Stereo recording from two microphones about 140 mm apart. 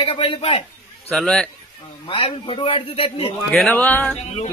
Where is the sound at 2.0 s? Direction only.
40° left (ahead or behind).